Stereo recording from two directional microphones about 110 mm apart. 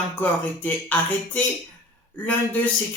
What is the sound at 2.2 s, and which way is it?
Speech, 15° left (ahead or behind).